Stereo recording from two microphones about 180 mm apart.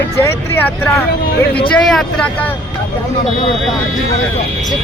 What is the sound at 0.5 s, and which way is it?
Speech, 10° left (ahead or behind).